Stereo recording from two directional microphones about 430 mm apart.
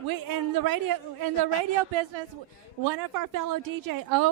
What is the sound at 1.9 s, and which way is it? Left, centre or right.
Speech, right.